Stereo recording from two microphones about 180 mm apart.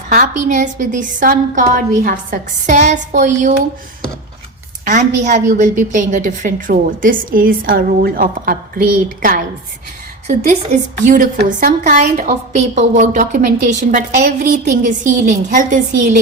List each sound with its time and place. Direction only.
0.1 s a woman's voice: 45° right (ahead or behind)
4.9 s a woman's voice: 45° right (ahead or behind)
10.2 s a woman's voice: 40° right (ahead or behind)